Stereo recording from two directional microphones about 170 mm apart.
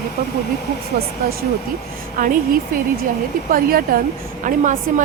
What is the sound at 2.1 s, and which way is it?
A woman's voice, 55° right (ahead or behind).